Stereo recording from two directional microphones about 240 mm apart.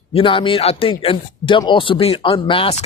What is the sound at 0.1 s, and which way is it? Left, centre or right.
Speech, left.